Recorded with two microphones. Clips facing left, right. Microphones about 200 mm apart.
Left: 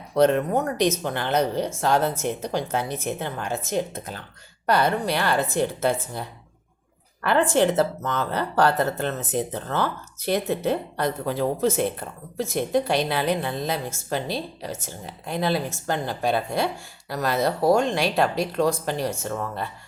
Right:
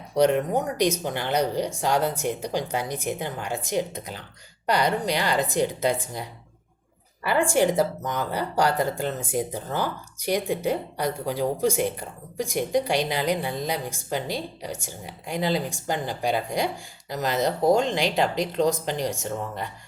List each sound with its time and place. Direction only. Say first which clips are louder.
0.2 s a woman's voice: left 1 dB; 15° right (ahead or behind)
7.3 s a woman's voice: left 1 dB; 10° right (ahead or behind)